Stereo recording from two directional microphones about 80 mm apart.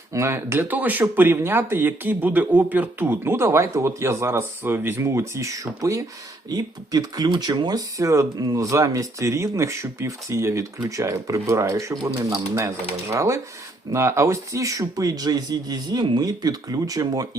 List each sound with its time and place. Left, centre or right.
0.1 s speech: right
6.5 s speech: right
7.9 s speech: right